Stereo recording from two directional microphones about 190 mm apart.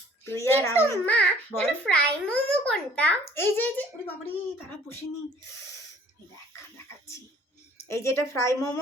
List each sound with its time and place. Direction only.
0.3 s a child's voice: 15° left (ahead or behind)
7.9 s a child's voice: 15° left (ahead or behind)